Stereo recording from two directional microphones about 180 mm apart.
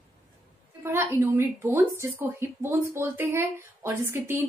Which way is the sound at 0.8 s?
15° right (ahead or behind).